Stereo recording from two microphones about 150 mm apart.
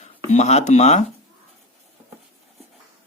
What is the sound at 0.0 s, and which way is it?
Speech, 50° left (ahead or behind).